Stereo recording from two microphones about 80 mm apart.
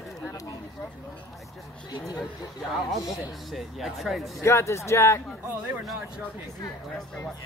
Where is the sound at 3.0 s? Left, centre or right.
Left.